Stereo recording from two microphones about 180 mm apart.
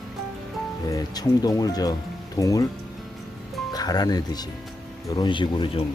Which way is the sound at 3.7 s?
20° left (ahead or behind).